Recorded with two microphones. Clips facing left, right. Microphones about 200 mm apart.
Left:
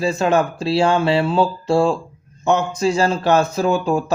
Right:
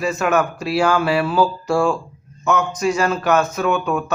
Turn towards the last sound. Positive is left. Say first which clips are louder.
# left 2 dB
turn(degrees=30)  # may be behind; listen again after turning